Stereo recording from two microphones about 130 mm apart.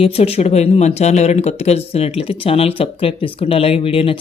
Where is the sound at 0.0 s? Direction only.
50° left (ahead or behind).